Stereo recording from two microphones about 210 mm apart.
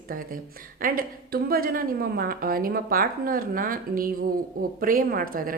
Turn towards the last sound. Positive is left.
turn(degrees=-40)  # may be behind; listen again after turning